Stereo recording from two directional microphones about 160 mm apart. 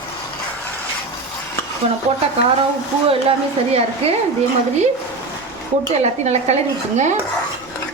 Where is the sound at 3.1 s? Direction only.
40° right (ahead or behind).